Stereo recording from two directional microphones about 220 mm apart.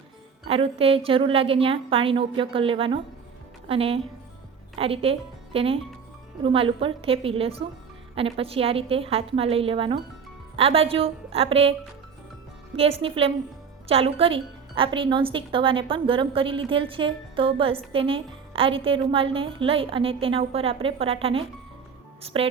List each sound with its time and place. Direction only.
0.4 s a woman's voice: 25° right (ahead or behind)
12.7 s a woman's voice: 25° right (ahead or behind)